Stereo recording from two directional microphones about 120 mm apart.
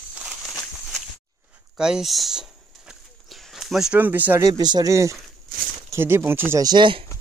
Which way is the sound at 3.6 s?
5° right (ahead or behind).